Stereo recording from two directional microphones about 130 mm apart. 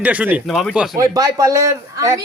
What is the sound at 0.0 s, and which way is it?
Speech, 10° right (ahead or behind).